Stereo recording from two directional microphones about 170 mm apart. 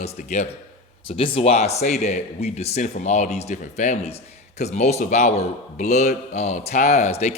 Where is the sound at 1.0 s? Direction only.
30° left (ahead or behind).